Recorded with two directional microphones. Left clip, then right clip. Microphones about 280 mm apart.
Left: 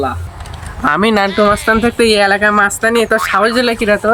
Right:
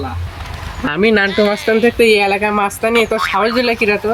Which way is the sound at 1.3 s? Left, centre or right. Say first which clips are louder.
Left 2 dB; centre.